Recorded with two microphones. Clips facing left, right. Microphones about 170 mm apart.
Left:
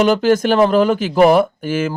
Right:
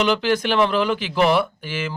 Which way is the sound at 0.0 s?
45° left (ahead or behind).